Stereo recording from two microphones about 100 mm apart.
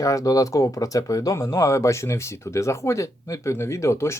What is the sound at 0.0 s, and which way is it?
Speech, 35° left (ahead or behind).